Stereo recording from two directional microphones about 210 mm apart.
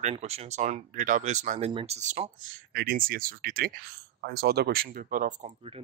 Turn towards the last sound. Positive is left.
turn(degrees=-30)  # may be behind; listen again after turning